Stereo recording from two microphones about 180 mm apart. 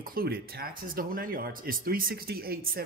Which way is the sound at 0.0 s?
55° right (ahead or behind).